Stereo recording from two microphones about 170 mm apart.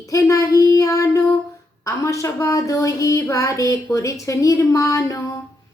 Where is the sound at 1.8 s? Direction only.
20° left (ahead or behind).